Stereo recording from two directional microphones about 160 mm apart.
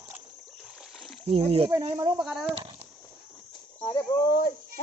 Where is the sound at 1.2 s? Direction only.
40° right (ahead or behind).